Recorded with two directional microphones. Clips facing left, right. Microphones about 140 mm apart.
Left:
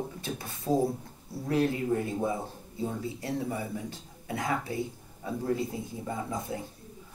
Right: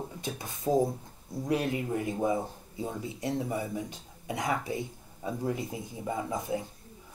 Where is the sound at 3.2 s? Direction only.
20° right (ahead or behind).